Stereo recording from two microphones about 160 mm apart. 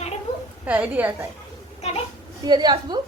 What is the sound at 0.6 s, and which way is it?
Speech, 10° right (ahead or behind).